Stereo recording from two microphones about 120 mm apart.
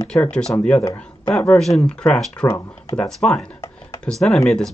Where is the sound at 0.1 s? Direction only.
5° left (ahead or behind).